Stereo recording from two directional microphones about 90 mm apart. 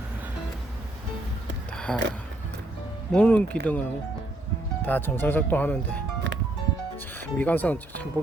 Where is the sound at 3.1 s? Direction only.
15° left (ahead or behind).